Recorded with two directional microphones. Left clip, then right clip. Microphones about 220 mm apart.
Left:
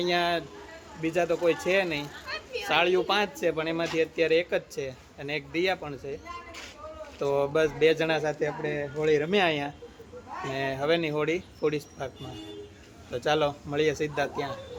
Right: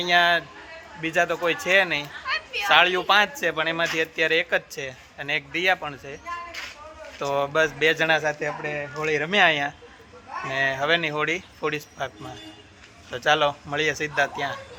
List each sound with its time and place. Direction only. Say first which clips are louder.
0.0 s a man's voice: right 7 dB; 5° right (ahead or behind)
2.2 s a sound: right 8 dB; 15° left (ahead or behind)
2.6 s a man's voice: right 6 dB; 5° right (ahead or behind)